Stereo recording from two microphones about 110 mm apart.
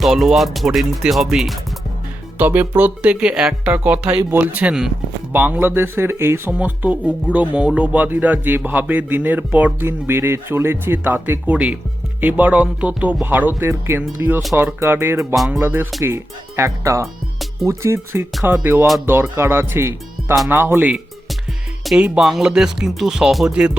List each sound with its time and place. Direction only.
0.0 s speech: centre (ahead or behind)
2.4 s speech: 15° right (ahead or behind)